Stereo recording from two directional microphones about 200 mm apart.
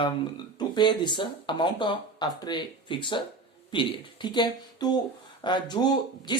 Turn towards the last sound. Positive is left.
turn(degrees=20)  # may be behind; listen again after turning